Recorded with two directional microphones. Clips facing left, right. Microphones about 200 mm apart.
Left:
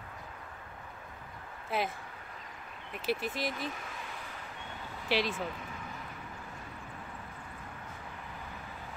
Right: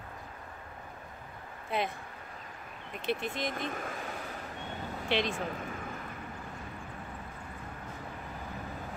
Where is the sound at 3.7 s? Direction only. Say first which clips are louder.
Right 6 dB; 50° right (ahead or behind).